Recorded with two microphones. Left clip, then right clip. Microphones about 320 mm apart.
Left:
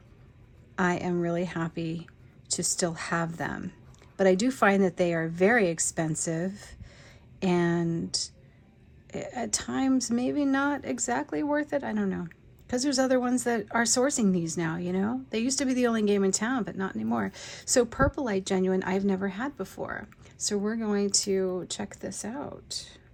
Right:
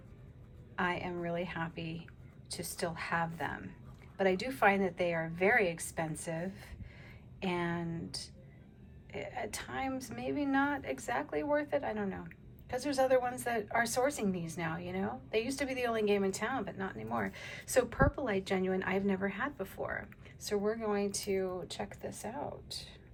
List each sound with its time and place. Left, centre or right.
0.8 s speech: centre